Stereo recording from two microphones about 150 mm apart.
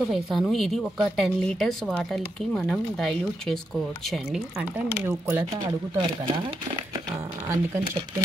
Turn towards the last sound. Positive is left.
turn(degrees=-15)  # may be behind; listen again after turning